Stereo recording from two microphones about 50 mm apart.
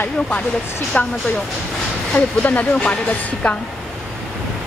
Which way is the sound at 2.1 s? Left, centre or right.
Left.